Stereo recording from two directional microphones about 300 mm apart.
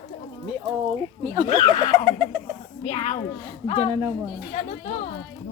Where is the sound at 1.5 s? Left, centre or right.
Centre.